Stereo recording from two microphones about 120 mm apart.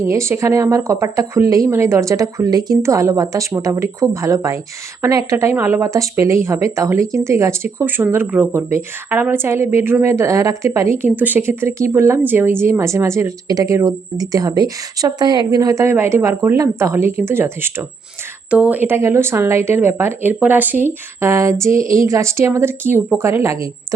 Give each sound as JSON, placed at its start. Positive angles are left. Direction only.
{"t": 0.0, "sound": "speech", "side_deg": -25}